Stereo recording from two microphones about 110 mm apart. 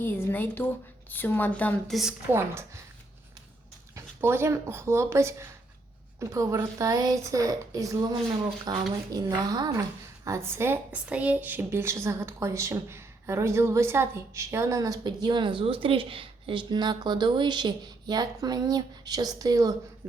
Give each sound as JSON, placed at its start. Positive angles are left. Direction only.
{"t": 0.0, "sound": "a woman's voice", "side_deg": 20}
{"t": 1.9, "sound": "a woman's voice", "side_deg": 0}
{"t": 2.3, "sound": "a woman's voice", "side_deg": -25}
{"t": 3.9, "sound": "a woman's voice", "side_deg": -20}
{"t": 10.9, "sound": "a woman's voice", "side_deg": -10}